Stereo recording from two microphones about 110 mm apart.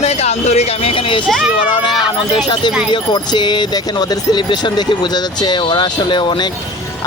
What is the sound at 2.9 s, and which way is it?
Speech, 45° left (ahead or behind).